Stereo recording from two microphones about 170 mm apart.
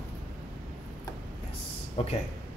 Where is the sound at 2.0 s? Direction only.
35° left (ahead or behind).